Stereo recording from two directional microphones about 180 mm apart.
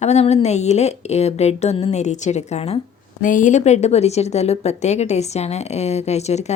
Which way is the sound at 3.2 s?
45° left (ahead or behind).